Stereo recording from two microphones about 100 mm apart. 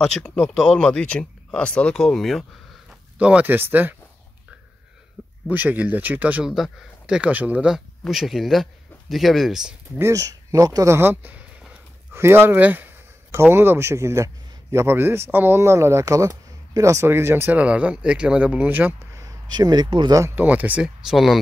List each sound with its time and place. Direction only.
0.0 s speech: 10° left (ahead or behind)
2.9 s speech: 10° right (ahead or behind)
5.2 s a sound: 10° right (ahead or behind)
5.5 s speech: 15° right (ahead or behind)
6.4 s speech: 5° right (ahead or behind)
9.9 s speech: 30° right (ahead or behind)
19.5 s speech: 45° right (ahead or behind)
20.3 s speech: 15° right (ahead or behind)
21.1 s speech: centre (ahead or behind)